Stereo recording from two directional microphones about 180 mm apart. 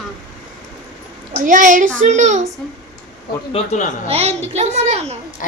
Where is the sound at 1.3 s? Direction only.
45° right (ahead or behind).